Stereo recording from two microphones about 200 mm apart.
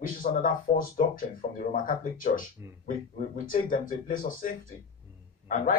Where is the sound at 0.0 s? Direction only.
45° left (ahead or behind).